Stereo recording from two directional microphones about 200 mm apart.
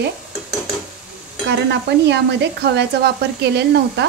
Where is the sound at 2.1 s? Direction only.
60° right (ahead or behind).